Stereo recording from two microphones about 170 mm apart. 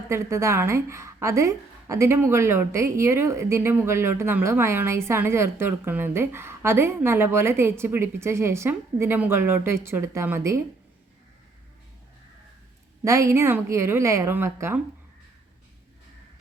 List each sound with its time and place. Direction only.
0.1 s a woman's voice: 15° right (ahead or behind)
13.1 s a woman's voice: 15° right (ahead or behind)